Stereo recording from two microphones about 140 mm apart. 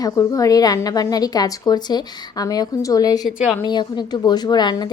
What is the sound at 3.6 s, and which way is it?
A woman's voice, 30° left (ahead or behind).